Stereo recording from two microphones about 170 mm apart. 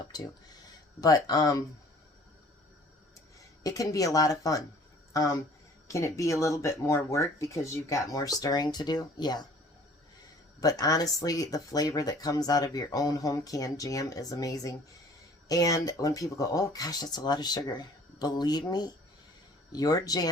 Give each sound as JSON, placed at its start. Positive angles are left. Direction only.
{"t": 0.1, "sound": "speech", "side_deg": 25}
{"t": 3.6, "sound": "speech", "side_deg": 20}
{"t": 10.6, "sound": "speech", "side_deg": 20}